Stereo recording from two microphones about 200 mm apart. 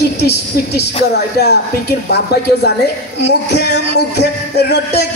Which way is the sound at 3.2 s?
55° left (ahead or behind).